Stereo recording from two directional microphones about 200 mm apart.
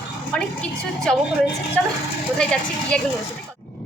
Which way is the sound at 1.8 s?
5° left (ahead or behind).